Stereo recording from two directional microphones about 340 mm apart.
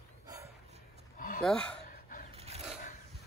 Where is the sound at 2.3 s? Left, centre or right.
Centre.